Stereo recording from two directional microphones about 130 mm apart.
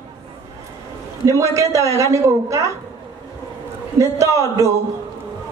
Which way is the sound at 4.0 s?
25° right (ahead or behind).